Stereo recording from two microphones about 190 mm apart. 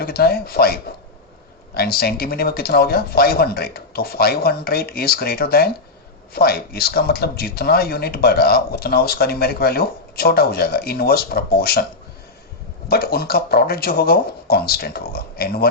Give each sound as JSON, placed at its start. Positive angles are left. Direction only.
{"t": 0.0, "sound": "speech", "side_deg": 55}
{"t": 12.9, "sound": "speech", "side_deg": 55}